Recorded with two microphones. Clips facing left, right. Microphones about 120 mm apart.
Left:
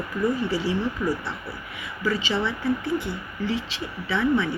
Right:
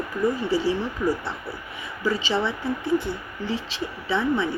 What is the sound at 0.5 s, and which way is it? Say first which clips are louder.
Speech: right 3 dB; 30° right (ahead or behind).